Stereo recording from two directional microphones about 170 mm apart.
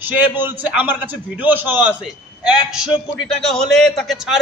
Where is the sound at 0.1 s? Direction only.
10° right (ahead or behind).